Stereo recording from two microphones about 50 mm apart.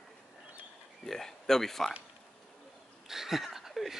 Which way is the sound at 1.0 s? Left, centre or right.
Centre.